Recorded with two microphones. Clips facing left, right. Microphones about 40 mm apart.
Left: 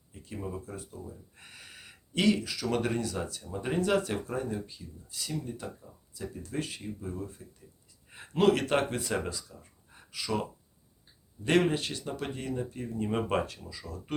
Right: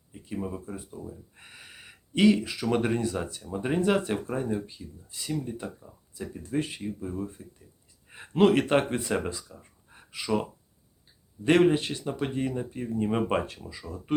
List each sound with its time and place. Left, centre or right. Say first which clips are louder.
0.1 s speech: right 4 dB; centre
1.4 s a sound: right 2 dB; centre
2.4 s speech: right 3 dB; right
11.4 s speech: right 5 dB; right